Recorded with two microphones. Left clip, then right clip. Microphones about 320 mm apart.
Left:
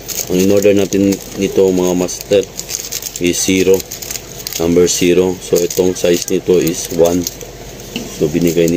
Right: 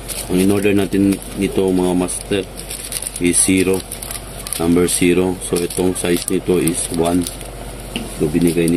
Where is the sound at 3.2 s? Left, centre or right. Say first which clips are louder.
Left 3 dB; centre.